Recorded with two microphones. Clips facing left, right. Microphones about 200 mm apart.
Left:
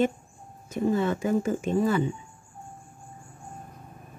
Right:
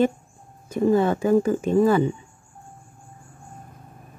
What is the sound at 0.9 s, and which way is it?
Speech, 35° right (ahead or behind).